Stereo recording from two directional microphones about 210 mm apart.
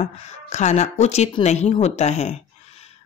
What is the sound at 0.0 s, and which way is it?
Speech, 35° left (ahead or behind).